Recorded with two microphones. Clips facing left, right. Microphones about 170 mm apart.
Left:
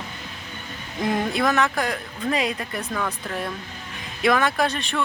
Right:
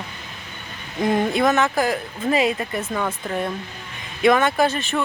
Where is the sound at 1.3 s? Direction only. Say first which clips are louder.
Right 3 dB; centre (ahead or behind).